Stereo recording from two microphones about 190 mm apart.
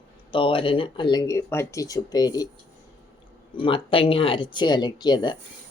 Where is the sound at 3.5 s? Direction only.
30° left (ahead or behind).